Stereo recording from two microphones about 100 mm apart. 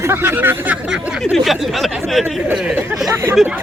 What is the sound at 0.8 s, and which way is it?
Speech, 5° right (ahead or behind).